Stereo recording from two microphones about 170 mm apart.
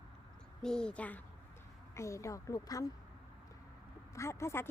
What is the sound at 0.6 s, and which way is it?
A woman's voice, 5° left (ahead or behind).